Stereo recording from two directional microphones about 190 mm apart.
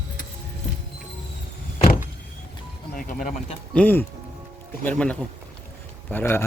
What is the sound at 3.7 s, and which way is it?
Speech, 10° left (ahead or behind).